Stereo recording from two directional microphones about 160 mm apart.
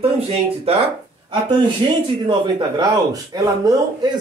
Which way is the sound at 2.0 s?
30° right (ahead or behind).